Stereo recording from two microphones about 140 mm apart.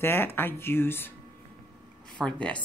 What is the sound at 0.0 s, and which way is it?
Speech, 15° left (ahead or behind).